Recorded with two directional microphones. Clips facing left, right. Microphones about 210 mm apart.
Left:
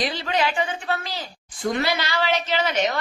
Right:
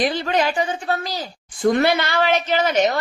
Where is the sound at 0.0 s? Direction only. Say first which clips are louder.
Right 4 dB; 50° right (ahead or behind).